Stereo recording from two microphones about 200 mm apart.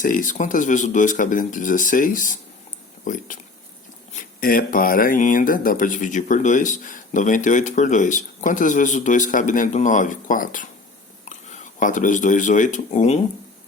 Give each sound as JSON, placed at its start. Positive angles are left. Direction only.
{"t": 0.0, "sound": "speech", "side_deg": 40}